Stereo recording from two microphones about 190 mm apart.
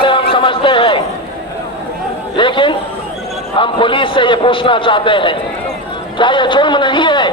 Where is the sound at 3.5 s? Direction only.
25° left (ahead or behind).